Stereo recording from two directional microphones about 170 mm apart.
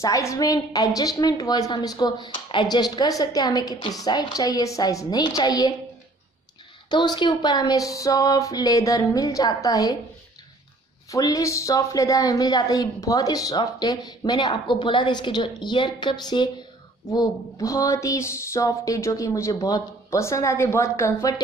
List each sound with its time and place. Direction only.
0.0 s a woman's voice: 20° left (ahead or behind)
6.9 s a woman's voice: 25° left (ahead or behind)
11.1 s a woman's voice: 20° left (ahead or behind)